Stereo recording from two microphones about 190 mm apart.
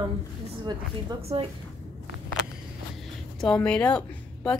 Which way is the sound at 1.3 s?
30° right (ahead or behind).